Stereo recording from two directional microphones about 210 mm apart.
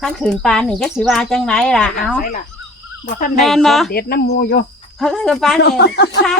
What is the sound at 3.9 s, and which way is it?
Speech, 50° left (ahead or behind).